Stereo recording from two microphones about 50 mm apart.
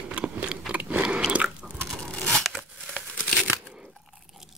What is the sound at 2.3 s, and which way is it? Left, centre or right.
Crunch, centre.